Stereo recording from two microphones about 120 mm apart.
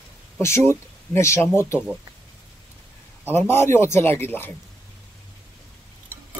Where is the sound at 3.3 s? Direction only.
20° left (ahead or behind).